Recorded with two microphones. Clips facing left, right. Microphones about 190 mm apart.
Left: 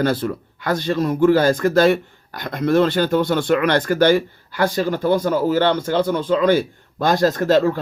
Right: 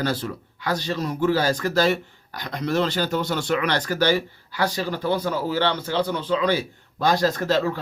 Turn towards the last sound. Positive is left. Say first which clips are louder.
# left 6 dB
turn(degrees=50)  # may be behind; listen again after turning